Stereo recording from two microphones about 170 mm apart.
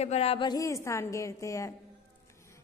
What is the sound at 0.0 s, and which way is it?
A woman's voice, 40° left (ahead or behind).